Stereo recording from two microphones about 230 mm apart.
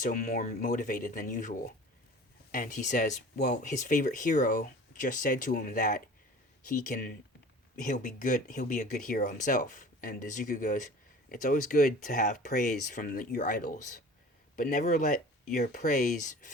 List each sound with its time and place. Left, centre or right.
0.0 s speech: left